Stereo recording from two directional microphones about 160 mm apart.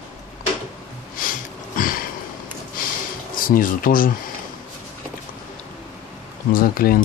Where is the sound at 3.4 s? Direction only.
60° left (ahead or behind).